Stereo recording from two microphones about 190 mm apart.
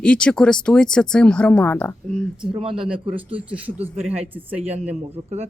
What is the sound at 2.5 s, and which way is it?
Speech, 30° right (ahead or behind).